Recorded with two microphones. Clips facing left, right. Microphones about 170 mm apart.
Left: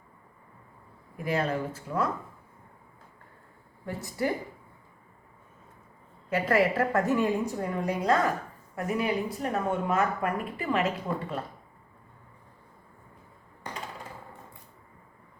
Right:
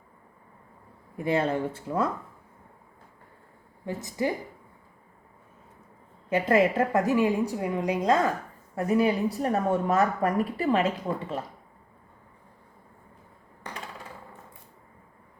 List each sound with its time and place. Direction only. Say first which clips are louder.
1.2 s speech: right 3 dB; 25° right (ahead or behind)
3.8 s speech: right 2 dB; 20° right (ahead or behind)
6.3 s a woman's voice: right 2 dB; 20° right (ahead or behind)
8.7 s speech: right 5 dB; 30° right (ahead or behind)